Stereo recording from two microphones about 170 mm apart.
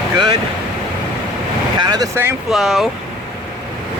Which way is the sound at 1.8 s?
25° right (ahead or behind).